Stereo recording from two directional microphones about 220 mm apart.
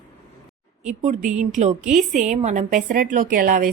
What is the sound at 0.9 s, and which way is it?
A woman's voice, 35° right (ahead or behind).